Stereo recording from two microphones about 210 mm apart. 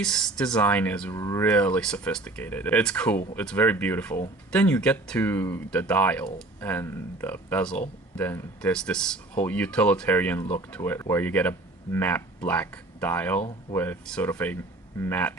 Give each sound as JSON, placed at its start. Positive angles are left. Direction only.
{"t": 0.0, "sound": "speech", "side_deg": 5}